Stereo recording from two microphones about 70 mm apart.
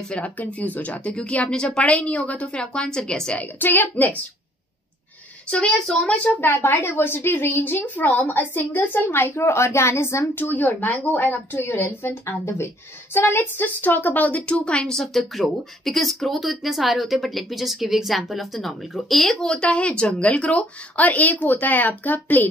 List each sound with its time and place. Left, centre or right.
0.1 s a woman's voice: left
3.3 s a woman's voice: left
5.5 s a woman's voice: centre
19.4 s a woman's voice: centre